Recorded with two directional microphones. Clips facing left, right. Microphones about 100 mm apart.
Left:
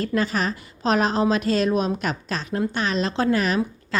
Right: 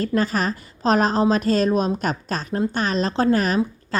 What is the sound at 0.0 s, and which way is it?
A woman's voice, 40° right (ahead or behind).